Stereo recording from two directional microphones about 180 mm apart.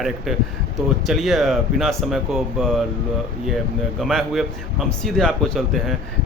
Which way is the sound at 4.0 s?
Centre (ahead or behind).